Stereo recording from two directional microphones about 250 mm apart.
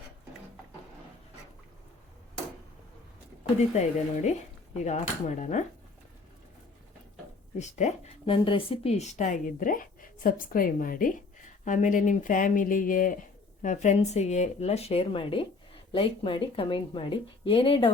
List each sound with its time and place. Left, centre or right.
3.8 s a woman's voice: left
7.6 s a woman's voice: left